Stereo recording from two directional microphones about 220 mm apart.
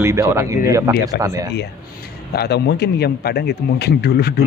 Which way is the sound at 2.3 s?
50° left (ahead or behind).